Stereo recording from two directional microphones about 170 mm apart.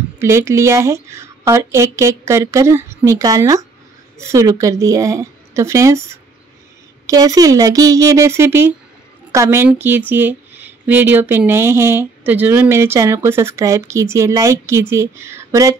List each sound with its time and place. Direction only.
0.2 s a woman's voice: 15° right (ahead or behind)
7.1 s a woman's voice: 20° right (ahead or behind)